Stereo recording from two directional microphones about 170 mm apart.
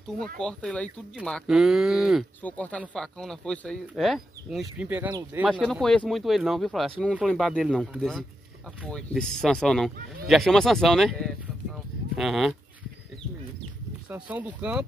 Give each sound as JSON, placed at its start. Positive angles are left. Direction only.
{"t": 0.2, "sound": "speech", "side_deg": 5}
{"t": 2.4, "sound": "speech", "side_deg": 10}
{"t": 5.5, "sound": "speech", "side_deg": 5}
{"t": 14.0, "sound": "speech", "side_deg": -10}